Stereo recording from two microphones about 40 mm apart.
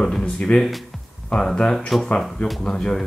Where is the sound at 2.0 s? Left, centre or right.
Left.